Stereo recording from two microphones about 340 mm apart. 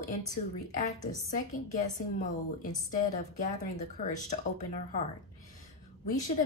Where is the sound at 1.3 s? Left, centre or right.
Left.